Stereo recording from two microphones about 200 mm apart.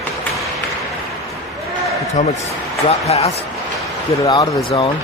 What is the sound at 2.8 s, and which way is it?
Speech, 30° left (ahead or behind).